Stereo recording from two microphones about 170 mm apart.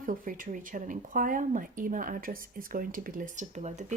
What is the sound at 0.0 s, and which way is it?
Speech, 55° right (ahead or behind).